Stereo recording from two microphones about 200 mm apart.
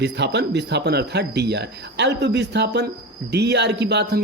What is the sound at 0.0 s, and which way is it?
Speech, 60° right (ahead or behind).